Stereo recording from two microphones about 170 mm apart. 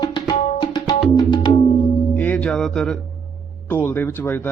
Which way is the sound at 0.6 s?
25° left (ahead or behind).